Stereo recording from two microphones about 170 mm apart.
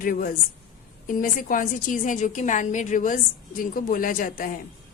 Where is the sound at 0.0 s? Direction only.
55° left (ahead or behind).